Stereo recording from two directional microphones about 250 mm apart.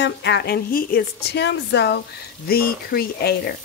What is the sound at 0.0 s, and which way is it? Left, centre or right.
Speech, left.